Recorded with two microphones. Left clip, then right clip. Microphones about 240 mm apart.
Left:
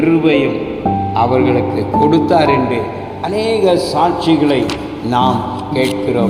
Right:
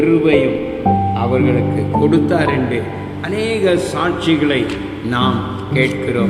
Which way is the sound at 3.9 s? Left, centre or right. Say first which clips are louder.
Left 4 dB; centre.